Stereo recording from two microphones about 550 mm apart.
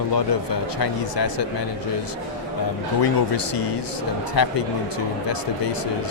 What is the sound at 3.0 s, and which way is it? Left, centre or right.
Speech, left.